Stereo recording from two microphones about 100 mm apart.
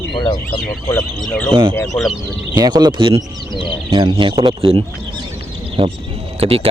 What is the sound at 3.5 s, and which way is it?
Speech, 55° left (ahead or behind).